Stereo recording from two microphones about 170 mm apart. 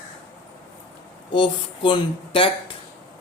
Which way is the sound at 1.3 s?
30° left (ahead or behind).